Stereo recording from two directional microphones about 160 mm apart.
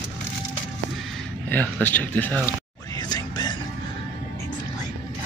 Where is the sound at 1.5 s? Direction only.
10° left (ahead or behind).